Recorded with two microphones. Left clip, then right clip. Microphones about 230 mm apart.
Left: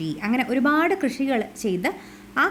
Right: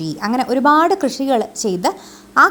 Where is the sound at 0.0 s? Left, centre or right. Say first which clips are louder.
Right 5 dB; centre.